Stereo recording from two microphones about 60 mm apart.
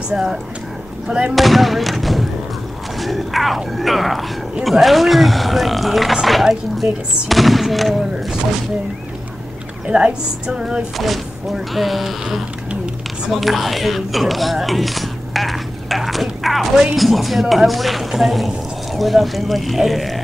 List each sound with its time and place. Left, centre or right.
0.1 s speech: centre
1.3 s speech: centre
9.8 s speech: centre
11.0 s speech: centre